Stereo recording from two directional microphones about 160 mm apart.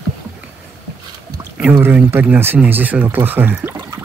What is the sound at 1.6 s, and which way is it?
Speech, 15° right (ahead or behind).